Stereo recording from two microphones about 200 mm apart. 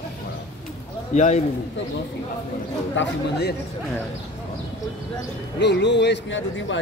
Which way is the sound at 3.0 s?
55° left (ahead or behind).